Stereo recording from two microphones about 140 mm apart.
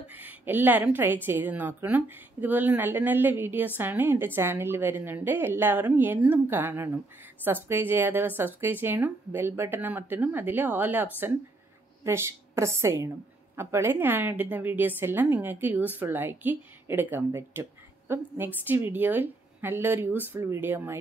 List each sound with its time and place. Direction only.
0.1 s a woman's voice: 10° right (ahead or behind)